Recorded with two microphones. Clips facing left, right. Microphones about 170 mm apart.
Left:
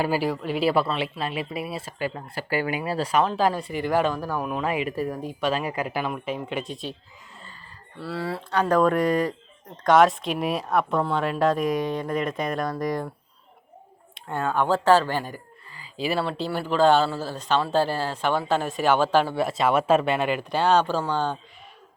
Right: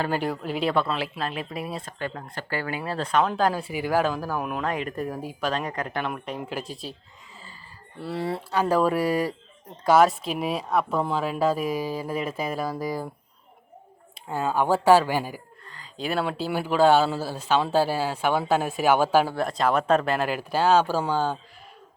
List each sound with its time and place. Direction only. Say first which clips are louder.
0.0 s speech: left 2 dB; 5° left (ahead or behind)
7.9 s speech: right 1 dB; 20° right (ahead or behind)
8.7 s speech: left 2 dB; 10° right (ahead or behind)
14.3 s speech: even; 5° right (ahead or behind)
15.6 s a sound: left 3 dB; 5° left (ahead or behind)
16.2 s speech: even; 10° right (ahead or behind)